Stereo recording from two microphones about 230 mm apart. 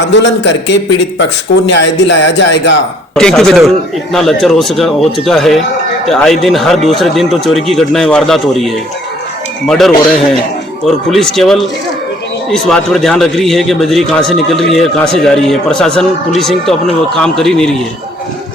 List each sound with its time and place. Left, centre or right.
0.1 s speech: left
3.2 s a man's voice: centre
11.1 s a man's voice: centre